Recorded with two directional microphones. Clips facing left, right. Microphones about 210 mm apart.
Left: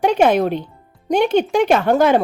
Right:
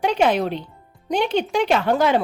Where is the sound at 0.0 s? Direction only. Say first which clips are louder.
Left 4 dB; 50° left (ahead or behind).